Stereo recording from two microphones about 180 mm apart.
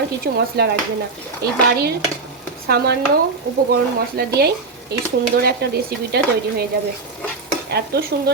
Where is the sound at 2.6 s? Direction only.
65° right (ahead or behind).